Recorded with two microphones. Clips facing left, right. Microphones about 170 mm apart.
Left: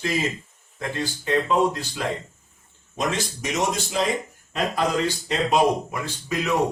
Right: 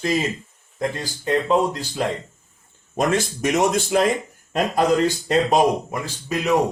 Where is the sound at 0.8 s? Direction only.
35° right (ahead or behind).